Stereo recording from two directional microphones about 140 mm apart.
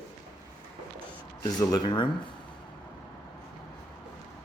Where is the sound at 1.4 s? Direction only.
25° left (ahead or behind).